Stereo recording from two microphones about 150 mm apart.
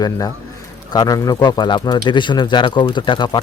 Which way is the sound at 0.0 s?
25° left (ahead or behind).